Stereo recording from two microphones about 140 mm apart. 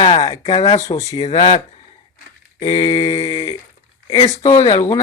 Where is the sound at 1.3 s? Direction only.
35° left (ahead or behind).